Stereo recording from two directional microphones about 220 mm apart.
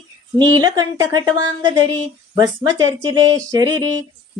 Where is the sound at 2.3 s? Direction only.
20° right (ahead or behind).